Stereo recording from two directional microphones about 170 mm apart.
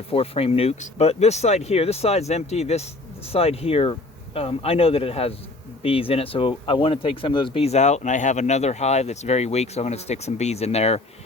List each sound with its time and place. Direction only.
0.1 s speech: 35° left (ahead or behind)